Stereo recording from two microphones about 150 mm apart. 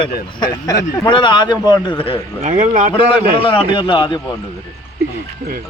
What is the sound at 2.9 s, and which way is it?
Speech, 35° left (ahead or behind).